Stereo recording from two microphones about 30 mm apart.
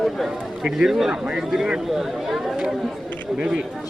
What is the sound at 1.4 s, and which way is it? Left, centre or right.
A man's voice, centre.